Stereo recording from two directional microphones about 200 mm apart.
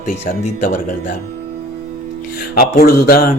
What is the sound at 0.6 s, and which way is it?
Speech, 40° left (ahead or behind).